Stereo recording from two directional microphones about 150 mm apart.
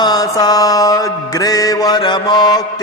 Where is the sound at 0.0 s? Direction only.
25° left (ahead or behind).